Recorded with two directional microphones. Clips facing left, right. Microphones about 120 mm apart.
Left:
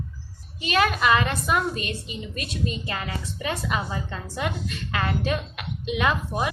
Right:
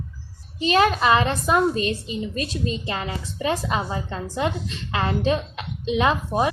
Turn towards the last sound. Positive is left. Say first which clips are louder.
# right 4 dB
turn(degrees=-30)  # may be behind; listen again after turning